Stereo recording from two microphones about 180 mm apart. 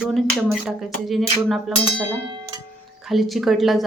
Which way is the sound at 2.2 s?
25° right (ahead or behind).